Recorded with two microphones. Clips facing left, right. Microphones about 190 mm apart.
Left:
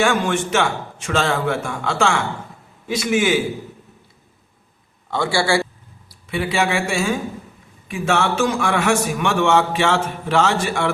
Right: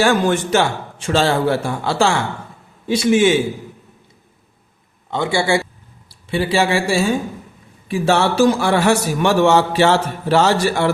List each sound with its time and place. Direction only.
0.0 s a man's voice: 35° right (ahead or behind)
5.1 s a man's voice: 20° right (ahead or behind)
6.1 s a man's voice: 30° right (ahead or behind)